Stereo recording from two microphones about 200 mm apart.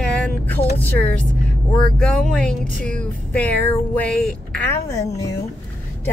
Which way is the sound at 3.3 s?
5° left (ahead or behind).